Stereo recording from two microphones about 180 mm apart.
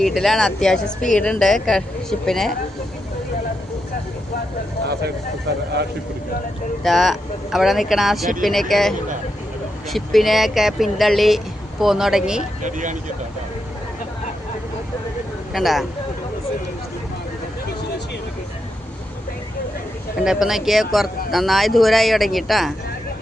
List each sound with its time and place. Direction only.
0.0 s speech: centre (ahead or behind)
6.8 s speech: centre (ahead or behind)
12.6 s speech: 45° right (ahead or behind)
15.5 s speech: centre (ahead or behind)
20.2 s speech: centre (ahead or behind)